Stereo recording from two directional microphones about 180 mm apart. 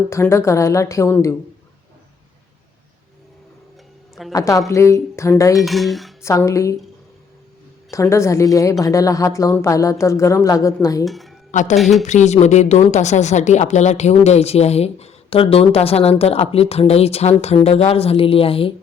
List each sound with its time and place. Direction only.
0.1 s speech: 15° left (ahead or behind)
4.3 s a woman's voice: 20° left (ahead or behind)
5.5 s dishes: centre (ahead or behind)
6.2 s speech: 15° left (ahead or behind)
7.9 s speech: 15° left (ahead or behind)
11.0 s speech: centre (ahead or behind)
11.8 s dishes: centre (ahead or behind)
12.0 s speech: 40° left (ahead or behind)